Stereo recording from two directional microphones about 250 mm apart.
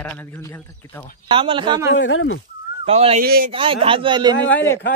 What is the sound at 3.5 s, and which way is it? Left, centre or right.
Speech, right.